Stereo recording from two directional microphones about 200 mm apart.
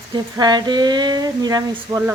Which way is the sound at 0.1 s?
20° right (ahead or behind).